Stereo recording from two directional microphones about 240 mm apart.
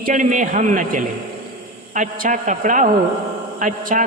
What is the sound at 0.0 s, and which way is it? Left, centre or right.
Speech, right.